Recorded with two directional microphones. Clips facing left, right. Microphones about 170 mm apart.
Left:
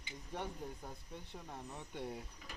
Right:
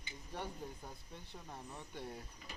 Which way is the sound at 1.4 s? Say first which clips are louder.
Left 1 dB; 5° left (ahead or behind).